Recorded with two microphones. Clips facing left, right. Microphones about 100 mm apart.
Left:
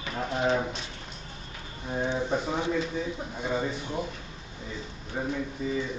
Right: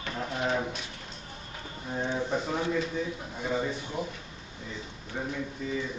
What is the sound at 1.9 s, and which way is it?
Speech, 15° left (ahead or behind).